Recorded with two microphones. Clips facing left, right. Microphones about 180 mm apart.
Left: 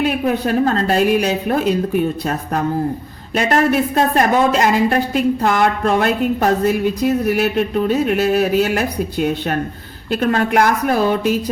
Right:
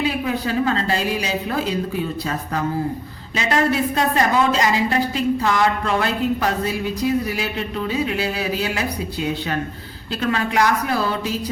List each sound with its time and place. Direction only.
0.0 s speech: 60° left (ahead or behind)